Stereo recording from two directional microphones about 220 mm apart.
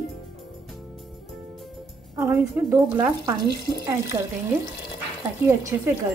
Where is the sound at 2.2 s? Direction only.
10° right (ahead or behind).